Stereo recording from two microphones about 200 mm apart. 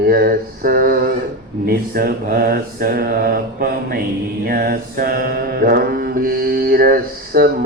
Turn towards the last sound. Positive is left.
turn(degrees=-50)  # may be behind; listen again after turning